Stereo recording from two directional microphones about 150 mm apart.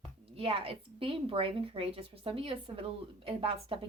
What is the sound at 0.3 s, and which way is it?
A woman's voice, 40° right (ahead or behind).